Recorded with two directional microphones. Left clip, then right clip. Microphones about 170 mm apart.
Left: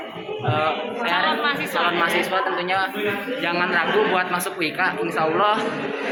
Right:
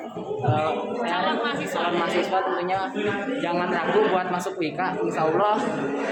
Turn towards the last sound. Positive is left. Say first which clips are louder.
# left 2 dB
turn(degrees=-15)  # may be behind; listen again after turning